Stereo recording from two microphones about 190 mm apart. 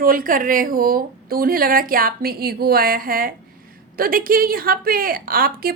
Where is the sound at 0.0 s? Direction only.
45° right (ahead or behind).